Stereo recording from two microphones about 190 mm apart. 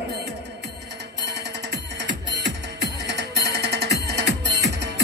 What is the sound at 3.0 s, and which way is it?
Music, 65° right (ahead or behind).